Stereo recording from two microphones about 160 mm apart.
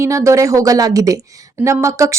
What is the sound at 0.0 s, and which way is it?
A woman's voice, 20° right (ahead or behind).